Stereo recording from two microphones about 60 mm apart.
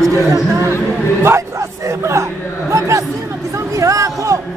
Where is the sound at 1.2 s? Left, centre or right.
Right.